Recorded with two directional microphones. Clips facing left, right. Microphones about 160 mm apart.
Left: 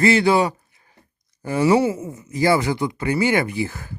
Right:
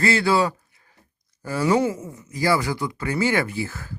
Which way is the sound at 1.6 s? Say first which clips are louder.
Left 3 dB; 10° left (ahead or behind).